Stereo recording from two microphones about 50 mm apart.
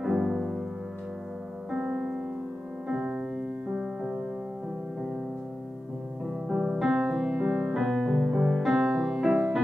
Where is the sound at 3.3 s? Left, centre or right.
Right.